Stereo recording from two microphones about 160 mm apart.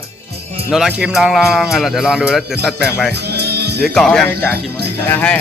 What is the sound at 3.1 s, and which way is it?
Music, 90° right.